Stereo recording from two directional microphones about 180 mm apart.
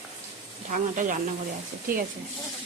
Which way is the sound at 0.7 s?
45° right (ahead or behind).